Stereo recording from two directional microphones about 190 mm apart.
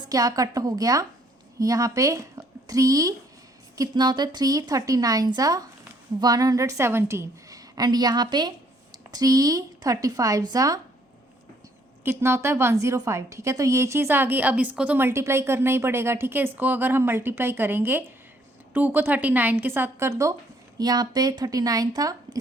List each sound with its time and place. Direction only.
0.1 s a woman's voice: 20° right (ahead or behind)
12.0 s a woman's voice: 15° right (ahead or behind)